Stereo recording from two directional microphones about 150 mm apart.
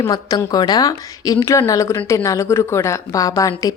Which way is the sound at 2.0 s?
10° left (ahead or behind).